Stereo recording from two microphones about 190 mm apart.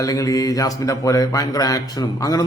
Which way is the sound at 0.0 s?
20° left (ahead or behind).